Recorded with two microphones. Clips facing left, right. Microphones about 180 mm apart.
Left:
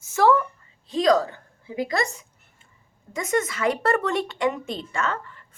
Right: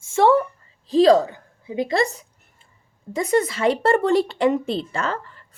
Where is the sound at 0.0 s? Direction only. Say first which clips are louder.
Right 3 dB; 25° right (ahead or behind).